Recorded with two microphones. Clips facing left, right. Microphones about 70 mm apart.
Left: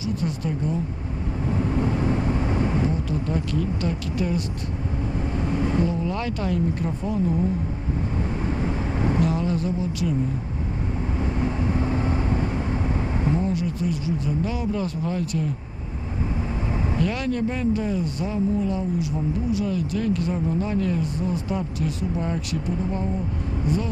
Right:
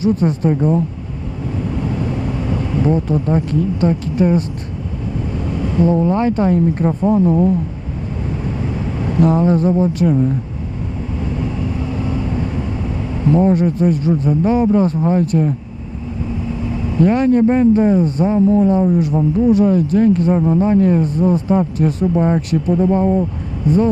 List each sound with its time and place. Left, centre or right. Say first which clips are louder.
0.0 s speech: right 12 dB; right
1.7 s vehicle: right 2 dB; left
2.8 s speech: right 9 dB; right
5.3 s vehicle: right 2 dB; left
5.8 s speech: right 11 dB; right
9.2 s speech: right 10 dB; right
11.4 s vehicle: right 2 dB; left
13.4 s speech: right 11 dB; right
16.5 s vehicle: right 5 dB; left
17.0 s speech: right 14 dB; right
23.6 s speech: right 12 dB; right